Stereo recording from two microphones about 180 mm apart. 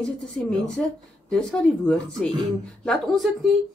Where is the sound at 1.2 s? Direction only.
5° left (ahead or behind).